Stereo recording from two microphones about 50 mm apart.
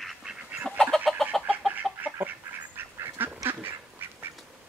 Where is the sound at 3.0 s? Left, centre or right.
Right.